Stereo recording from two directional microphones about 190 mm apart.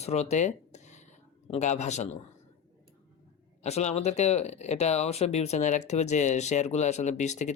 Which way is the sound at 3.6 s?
35° left (ahead or behind).